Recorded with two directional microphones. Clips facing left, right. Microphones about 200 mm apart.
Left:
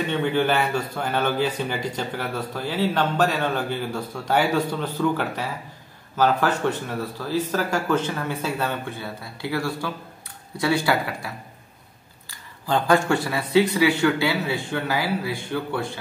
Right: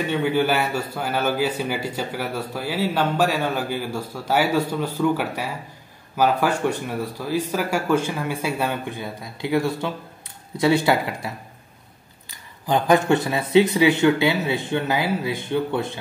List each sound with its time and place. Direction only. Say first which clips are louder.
0.1 s a man's voice: right 1 dB; 10° right (ahead or behind)